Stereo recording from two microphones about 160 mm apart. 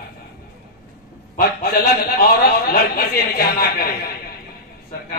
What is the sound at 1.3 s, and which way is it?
A man's voice, 75° left (ahead or behind).